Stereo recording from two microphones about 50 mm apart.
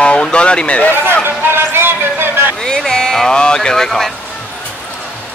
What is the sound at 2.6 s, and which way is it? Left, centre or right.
Speech, centre.